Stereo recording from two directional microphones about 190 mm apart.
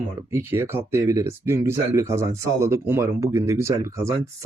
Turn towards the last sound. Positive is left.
turn(degrees=-15)  # may be behind; listen again after turning